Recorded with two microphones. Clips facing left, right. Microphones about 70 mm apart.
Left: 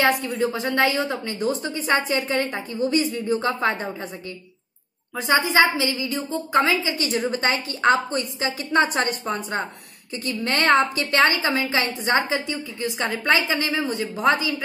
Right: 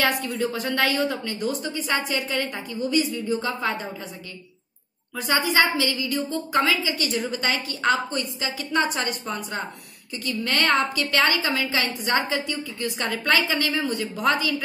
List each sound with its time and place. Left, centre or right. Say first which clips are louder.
0.3 s a woman's voice: left 2 dB; left
5.1 s a woman's voice: left 3 dB; left